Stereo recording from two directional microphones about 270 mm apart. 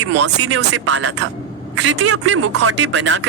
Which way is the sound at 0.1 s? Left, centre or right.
Right.